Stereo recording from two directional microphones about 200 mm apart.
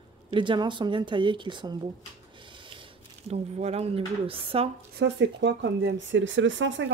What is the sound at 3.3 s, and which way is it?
A woman's voice, 30° right (ahead or behind).